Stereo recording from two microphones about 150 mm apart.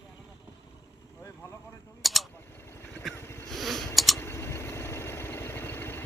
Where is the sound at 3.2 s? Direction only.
15° left (ahead or behind).